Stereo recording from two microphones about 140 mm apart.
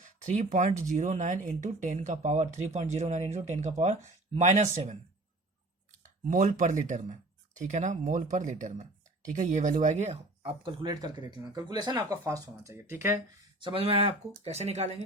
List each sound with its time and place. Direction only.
0.0 s speech: 60° right (ahead or behind)
5.9 s speech: 65° right (ahead or behind); by 10.5 s 50° right (ahead or behind)
10.6 s speech: 35° right (ahead or behind); by 13.2 s 20° right (ahead or behind)
13.6 s speech: 35° right (ahead or behind)